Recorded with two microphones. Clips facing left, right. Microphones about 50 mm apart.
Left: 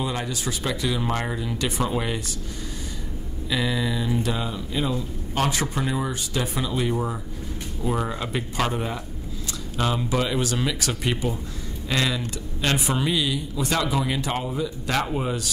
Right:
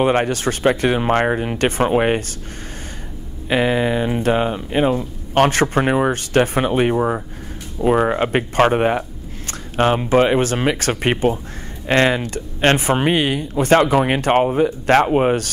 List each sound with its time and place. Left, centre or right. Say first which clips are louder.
0.0 s speech: right 11 dB; right
3.4 s speech: right 8 dB; right